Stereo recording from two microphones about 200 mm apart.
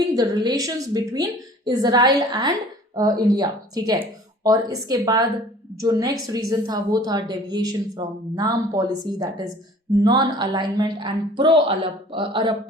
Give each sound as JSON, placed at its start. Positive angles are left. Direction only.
{"t": 0.1, "sound": "a woman's voice", "side_deg": -20}